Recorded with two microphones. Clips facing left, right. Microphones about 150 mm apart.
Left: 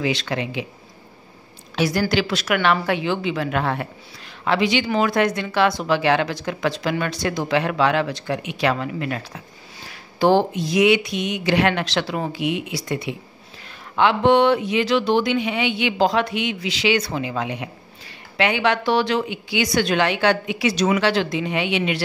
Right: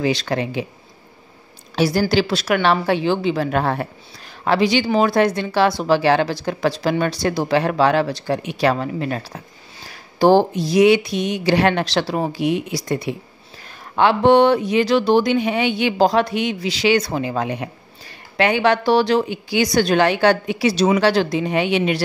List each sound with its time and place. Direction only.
0.0 s speech: 40° right (ahead or behind)
1.8 s speech: 30° right (ahead or behind)